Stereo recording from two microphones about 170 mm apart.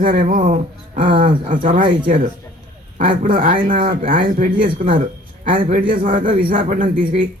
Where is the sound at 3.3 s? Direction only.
50° right (ahead or behind).